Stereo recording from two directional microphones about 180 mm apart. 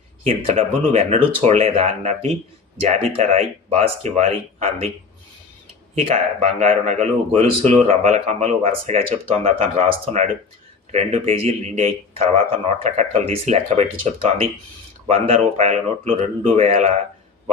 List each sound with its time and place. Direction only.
0.3 s speech: 35° right (ahead or behind)
6.4 s speech: 40° right (ahead or behind)